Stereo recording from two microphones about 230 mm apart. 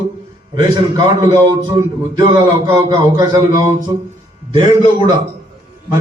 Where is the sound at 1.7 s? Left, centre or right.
Centre.